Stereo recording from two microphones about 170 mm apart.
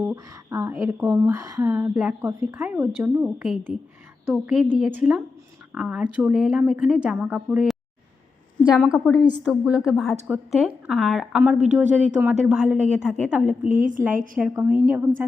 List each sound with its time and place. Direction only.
0.0 s speech: 15° right (ahead or behind)
8.8 s speech: centre (ahead or behind)
13.7 s a woman's voice: 50° right (ahead or behind)
14.4 s speech: 10° right (ahead or behind)